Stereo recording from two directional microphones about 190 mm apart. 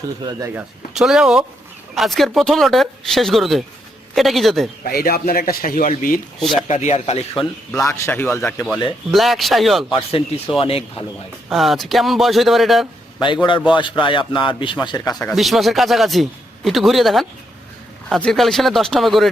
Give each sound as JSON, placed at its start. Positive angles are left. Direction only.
{"t": 0.2, "sound": "speech", "side_deg": -20}
{"t": 0.9, "sound": "speech", "side_deg": 0}
{"t": 4.8, "sound": "a man's voice", "side_deg": 50}
{"t": 6.7, "sound": "a man's voice", "side_deg": 35}
{"t": 7.9, "sound": "speech", "side_deg": 15}
{"t": 9.9, "sound": "a man's voice", "side_deg": 30}
{"t": 11.5, "sound": "speech", "side_deg": 0}
{"t": 13.1, "sound": "speech", "side_deg": 25}
{"t": 15.1, "sound": "speech", "side_deg": 0}